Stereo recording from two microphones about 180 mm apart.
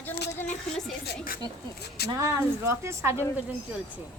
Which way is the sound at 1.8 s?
60° left (ahead or behind).